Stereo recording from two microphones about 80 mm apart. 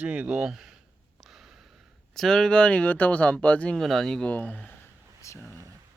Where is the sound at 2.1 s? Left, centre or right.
Centre.